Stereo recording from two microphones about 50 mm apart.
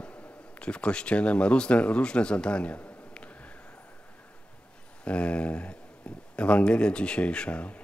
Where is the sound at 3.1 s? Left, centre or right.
Left.